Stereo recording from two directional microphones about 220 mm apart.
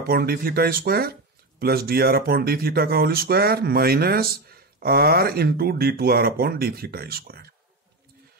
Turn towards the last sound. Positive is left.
turn(degrees=-45)  # may be behind; listen again after turning